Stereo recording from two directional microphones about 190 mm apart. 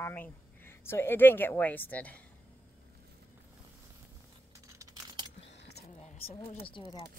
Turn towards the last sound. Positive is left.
turn(degrees=25)  # may be behind; listen again after turning